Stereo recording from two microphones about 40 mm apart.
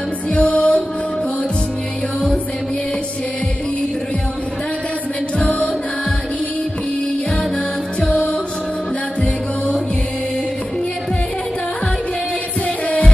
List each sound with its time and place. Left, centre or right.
0.3 s music: left
0.6 s music: centre
5.4 s music: left